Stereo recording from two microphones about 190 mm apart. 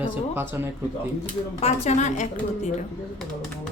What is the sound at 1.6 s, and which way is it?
A woman's voice, 35° left (ahead or behind).